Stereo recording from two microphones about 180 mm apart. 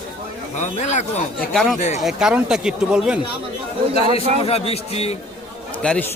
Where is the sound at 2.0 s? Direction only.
5° right (ahead or behind).